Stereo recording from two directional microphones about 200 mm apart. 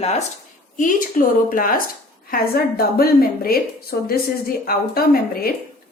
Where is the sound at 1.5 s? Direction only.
45° left (ahead or behind).